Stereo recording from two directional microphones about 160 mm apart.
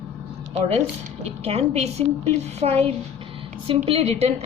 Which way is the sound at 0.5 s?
40° right (ahead or behind).